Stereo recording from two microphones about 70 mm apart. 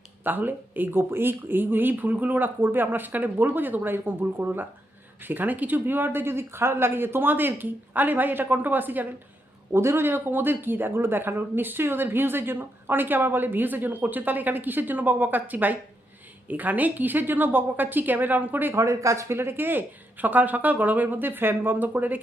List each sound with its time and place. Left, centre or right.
0.3 s speech: right
9.7 s speech: right
18.7 s speech: right